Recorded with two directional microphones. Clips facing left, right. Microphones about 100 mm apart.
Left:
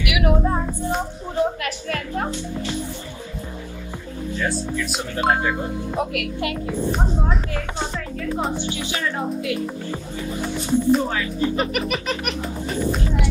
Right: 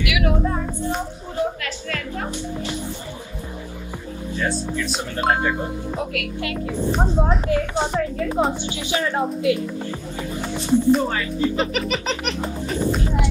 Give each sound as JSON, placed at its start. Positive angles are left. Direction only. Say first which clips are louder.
{"t": 0.0, "sound": "speech", "louder": "left 1 dB", "side_deg": 25}
{"t": 4.9, "sound": "speech", "louder": "left 1 dB", "side_deg": 0}
{"t": 5.9, "sound": "speech", "louder": "left 4 dB", "side_deg": 25}
{"t": 7.5, "sound": "speech", "louder": "right 6 dB", "side_deg": -20}
{"t": 10.7, "sound": "speech", "louder": "right 2 dB", "side_deg": 0}